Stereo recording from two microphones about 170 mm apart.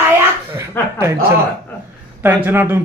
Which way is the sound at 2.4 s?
15° right (ahead or behind).